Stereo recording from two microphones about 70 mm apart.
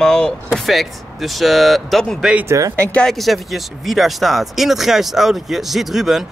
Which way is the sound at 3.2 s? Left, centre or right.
Centre.